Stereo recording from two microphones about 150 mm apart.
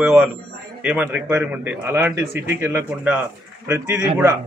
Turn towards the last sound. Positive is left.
turn(degrees=-15)  # may be behind; listen again after turning